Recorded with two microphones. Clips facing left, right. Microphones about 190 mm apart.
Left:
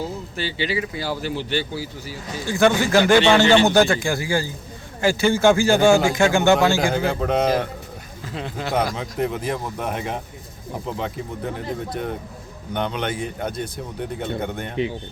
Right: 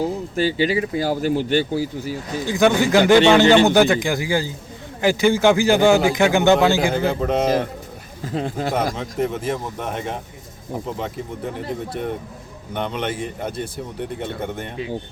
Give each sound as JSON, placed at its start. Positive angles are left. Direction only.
{"t": 0.3, "sound": "speech", "side_deg": -45}
{"t": 2.4, "sound": "speech", "side_deg": -15}
{"t": 6.8, "sound": "speech", "side_deg": -5}
{"t": 8.2, "sound": "speech", "side_deg": -45}
{"t": 9.0, "sound": "speech", "side_deg": 0}